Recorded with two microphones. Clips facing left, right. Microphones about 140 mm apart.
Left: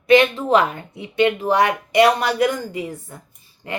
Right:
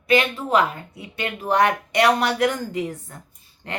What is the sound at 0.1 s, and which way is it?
Speech, 25° left (ahead or behind).